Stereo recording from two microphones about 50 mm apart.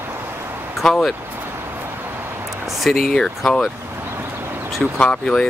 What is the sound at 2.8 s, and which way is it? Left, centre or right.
Speech, centre.